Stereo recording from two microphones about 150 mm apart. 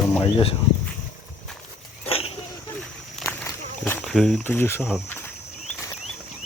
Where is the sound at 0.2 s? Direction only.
35° left (ahead or behind).